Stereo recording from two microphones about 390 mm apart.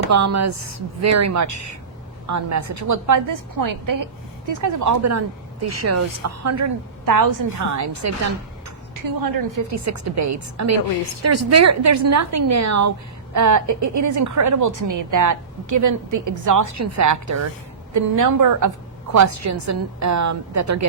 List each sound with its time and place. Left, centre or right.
0.1 s a woman's voice: right